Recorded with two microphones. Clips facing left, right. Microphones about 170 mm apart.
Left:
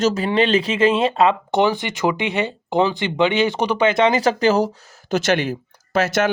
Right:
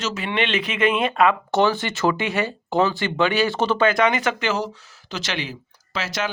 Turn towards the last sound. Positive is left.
turn(degrees=50)  # may be behind; listen again after turning